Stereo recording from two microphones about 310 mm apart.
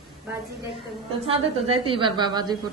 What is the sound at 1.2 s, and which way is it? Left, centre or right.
A woman's voice, centre.